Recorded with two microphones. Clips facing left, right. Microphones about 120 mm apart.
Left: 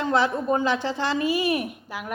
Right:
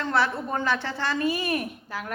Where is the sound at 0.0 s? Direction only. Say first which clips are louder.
Left 3 dB; 15° left (ahead or behind).